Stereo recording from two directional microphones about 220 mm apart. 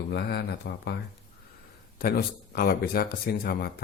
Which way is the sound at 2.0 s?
45° left (ahead or behind).